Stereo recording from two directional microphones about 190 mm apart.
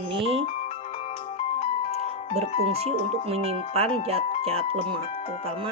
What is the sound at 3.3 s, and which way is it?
Speech, 30° right (ahead or behind).